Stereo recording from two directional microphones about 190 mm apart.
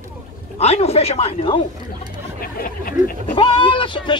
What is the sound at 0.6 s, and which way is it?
Speech, 35° left (ahead or behind).